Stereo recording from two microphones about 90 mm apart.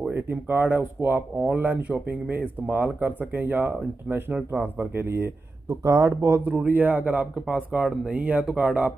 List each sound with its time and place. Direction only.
0.1 s speech: 25° right (ahead or behind)
1.6 s speech: 15° right (ahead or behind); by 6.4 s 35° right (ahead or behind)
6.4 s speech: 20° right (ahead or behind)
7.3 s speech: centre (ahead or behind)
8.1 s speech: 15° right (ahead or behind)